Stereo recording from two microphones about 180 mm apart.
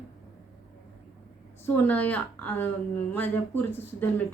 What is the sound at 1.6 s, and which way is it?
Speech, 10° left (ahead or behind).